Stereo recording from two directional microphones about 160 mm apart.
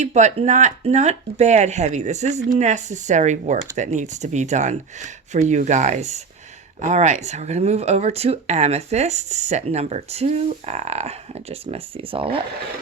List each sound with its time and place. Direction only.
0.0 s speech: 45° right (ahead or behind)